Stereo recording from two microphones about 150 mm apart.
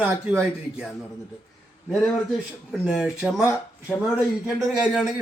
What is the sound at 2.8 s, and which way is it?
Speech, 5° right (ahead or behind).